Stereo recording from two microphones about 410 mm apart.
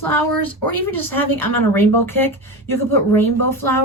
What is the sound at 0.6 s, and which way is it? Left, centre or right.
Speech, left.